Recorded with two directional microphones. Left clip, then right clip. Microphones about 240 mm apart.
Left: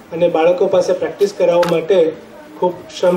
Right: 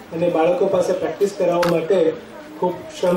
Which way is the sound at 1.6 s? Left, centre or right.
Left.